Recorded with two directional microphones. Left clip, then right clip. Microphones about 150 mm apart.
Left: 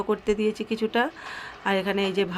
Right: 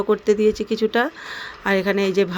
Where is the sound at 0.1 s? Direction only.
20° right (ahead or behind).